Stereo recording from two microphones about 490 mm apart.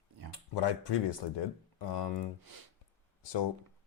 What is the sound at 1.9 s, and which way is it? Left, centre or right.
Speech, left.